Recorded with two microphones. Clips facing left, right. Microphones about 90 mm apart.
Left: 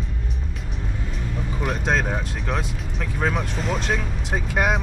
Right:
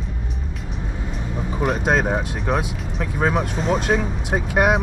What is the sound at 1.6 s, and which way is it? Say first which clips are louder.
Speech: right 4 dB; 5° right (ahead or behind).